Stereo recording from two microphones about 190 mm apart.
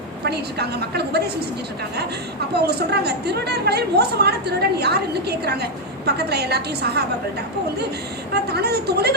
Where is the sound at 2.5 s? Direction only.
60° right (ahead or behind).